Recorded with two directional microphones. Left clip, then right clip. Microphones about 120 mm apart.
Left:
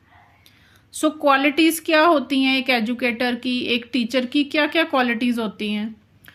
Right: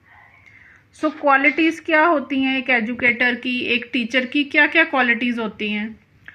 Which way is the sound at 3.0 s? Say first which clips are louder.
Right 5 dB; 60° left (ahead or behind).